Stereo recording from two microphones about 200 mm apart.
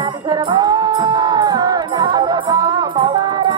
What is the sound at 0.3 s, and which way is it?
Music, 20° right (ahead or behind).